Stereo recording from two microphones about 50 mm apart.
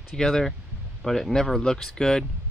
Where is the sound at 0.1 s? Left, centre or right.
Centre.